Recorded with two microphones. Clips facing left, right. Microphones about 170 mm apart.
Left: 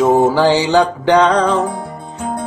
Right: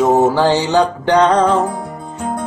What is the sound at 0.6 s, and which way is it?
Music, 90° left.